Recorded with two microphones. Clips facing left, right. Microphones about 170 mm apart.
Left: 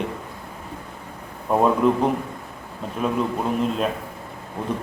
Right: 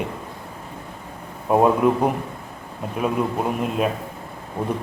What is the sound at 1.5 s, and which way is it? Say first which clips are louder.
A man's voice: right 1 dB; 10° right (ahead or behind).